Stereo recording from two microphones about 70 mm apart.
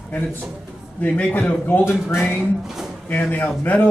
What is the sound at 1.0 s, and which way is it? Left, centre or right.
Speech, centre.